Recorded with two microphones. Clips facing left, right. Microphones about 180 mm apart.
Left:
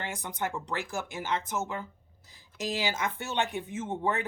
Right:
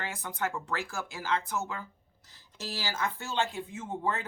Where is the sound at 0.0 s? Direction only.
15° left (ahead or behind).